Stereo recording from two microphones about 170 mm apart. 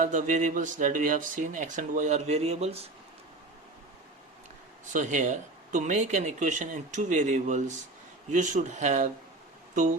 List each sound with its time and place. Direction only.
0.0 s speech: 50° right (ahead or behind)
4.9 s speech: 50° right (ahead or behind)